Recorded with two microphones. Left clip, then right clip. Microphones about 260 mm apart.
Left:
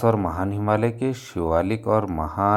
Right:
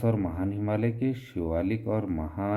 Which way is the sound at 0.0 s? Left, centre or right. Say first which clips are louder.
Left 8 dB; centre.